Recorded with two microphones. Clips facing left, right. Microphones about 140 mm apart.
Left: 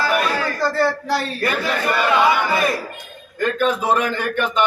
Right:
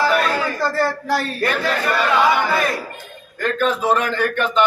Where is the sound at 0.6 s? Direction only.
5° right (ahead or behind).